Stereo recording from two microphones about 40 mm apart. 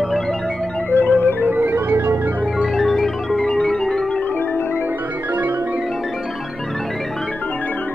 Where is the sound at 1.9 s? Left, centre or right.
Right.